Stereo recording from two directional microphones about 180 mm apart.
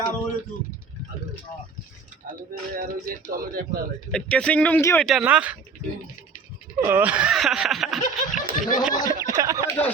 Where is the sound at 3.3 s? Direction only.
50° right (ahead or behind).